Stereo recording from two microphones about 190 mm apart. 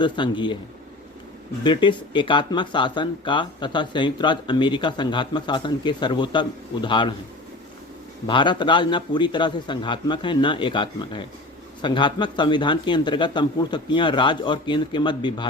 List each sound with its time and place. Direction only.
0.0 s speech: 25° left (ahead or behind)
1.6 s speech: 25° left (ahead or behind)
8.3 s speech: 25° left (ahead or behind)